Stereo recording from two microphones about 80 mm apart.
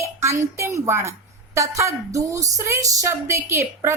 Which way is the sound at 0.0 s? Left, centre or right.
Right.